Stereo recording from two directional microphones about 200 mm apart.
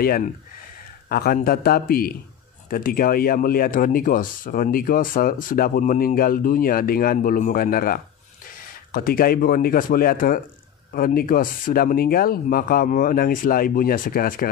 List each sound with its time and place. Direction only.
0.0 s speech: 50° left (ahead or behind)